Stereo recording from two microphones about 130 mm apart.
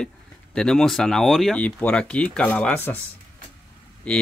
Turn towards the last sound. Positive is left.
turn(degrees=10)  # may be behind; listen again after turning